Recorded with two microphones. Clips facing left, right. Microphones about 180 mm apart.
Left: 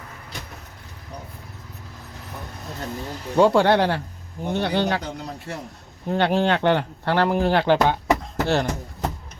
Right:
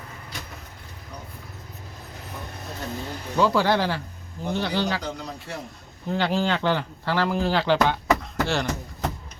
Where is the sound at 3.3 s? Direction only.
60° left (ahead or behind).